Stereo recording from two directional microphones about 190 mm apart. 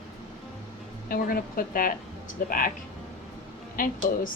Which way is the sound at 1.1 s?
50° left (ahead or behind).